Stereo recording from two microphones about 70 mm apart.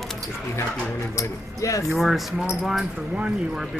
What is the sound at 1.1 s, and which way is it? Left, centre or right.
Speech, left.